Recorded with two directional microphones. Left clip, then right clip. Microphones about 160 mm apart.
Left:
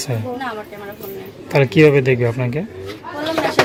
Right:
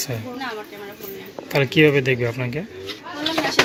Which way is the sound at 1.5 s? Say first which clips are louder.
Left 4 dB; 15° left (ahead or behind).